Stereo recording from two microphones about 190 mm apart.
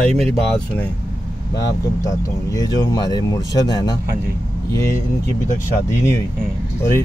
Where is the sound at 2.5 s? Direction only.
20° left (ahead or behind).